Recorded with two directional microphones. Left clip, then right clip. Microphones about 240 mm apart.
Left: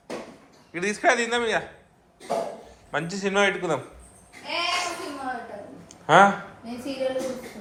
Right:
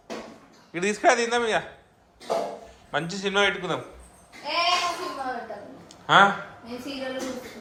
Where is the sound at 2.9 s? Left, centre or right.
Centre.